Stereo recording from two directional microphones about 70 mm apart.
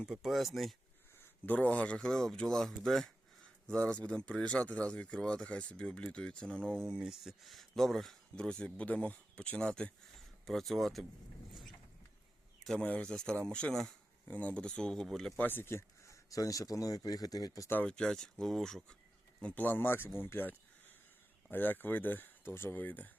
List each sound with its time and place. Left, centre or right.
0.0 s speech: centre
1.5 s speech: centre
6.9 s speech: centre
12.8 s speech: left
13.1 s speech: centre
14.3 s speech: left; by 15.4 s centre
15.4 s speech: left
16.3 s speech: left
17.8 s speech: centre
19.5 s speech: left